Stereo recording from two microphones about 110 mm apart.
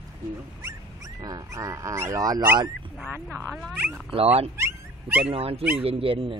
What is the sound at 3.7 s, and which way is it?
Speech, 15° right (ahead or behind).